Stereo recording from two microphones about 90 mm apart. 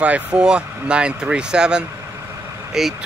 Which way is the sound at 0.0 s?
15° right (ahead or behind).